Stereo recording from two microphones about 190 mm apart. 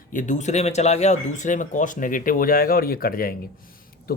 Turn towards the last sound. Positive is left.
turn(degrees=50)  # may be behind; listen again after turning